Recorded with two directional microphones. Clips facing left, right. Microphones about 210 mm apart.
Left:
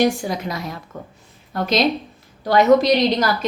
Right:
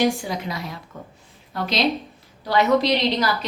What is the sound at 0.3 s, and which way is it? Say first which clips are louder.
A woman's voice: left 3 dB; 45° left (ahead or behind).